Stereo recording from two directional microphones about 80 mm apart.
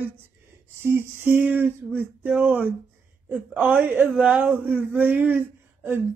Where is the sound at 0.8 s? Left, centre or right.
Right.